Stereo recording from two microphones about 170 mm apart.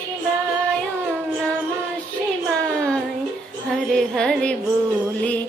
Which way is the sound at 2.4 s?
5° left (ahead or behind).